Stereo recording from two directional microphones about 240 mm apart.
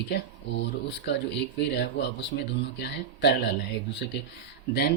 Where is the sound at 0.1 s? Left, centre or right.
Left.